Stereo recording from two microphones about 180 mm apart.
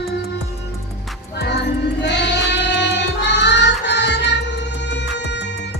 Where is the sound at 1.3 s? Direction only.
70° left (ahead or behind).